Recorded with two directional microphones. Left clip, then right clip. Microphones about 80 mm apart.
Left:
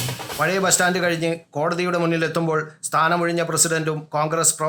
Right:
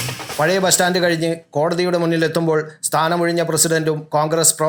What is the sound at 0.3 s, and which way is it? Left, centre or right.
Speech, right.